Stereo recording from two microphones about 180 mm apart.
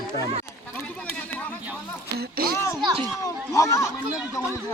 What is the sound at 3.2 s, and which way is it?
Speech, 15° left (ahead or behind).